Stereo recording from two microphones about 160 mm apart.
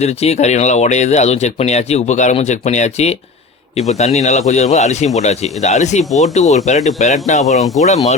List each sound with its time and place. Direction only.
0.0 s speech: 40° left (ahead or behind)